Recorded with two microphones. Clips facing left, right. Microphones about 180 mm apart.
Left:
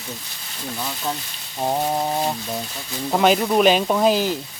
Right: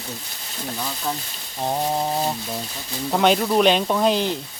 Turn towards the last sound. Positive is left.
turn(degrees=5)  # may be behind; listen again after turning